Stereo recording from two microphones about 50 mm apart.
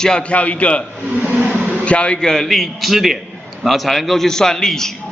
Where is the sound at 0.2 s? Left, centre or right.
Left.